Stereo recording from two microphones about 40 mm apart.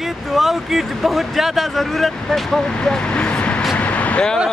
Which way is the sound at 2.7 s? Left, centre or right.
Centre.